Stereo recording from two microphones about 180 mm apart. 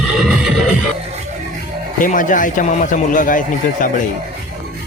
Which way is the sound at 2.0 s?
45° left (ahead or behind).